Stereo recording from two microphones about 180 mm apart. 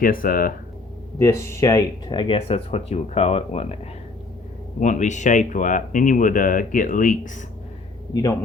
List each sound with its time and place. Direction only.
0.0 s speech: 50° left (ahead or behind)
1.2 s speech: 15° left (ahead or behind); by 3.8 s 35° left (ahead or behind)
4.8 s speech: 45° left (ahead or behind)
8.1 s a man's voice: 20° left (ahead or behind)